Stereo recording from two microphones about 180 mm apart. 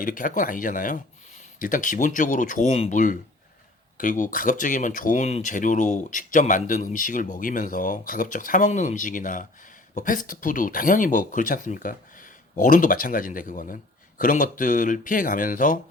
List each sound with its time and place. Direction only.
0.0 s speech: 50° left (ahead or behind)